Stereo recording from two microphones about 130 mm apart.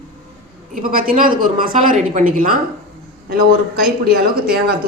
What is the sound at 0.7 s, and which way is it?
A woman's voice, 90° right.